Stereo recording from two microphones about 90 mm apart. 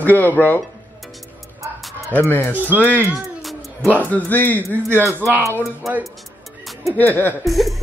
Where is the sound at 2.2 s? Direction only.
20° left (ahead or behind).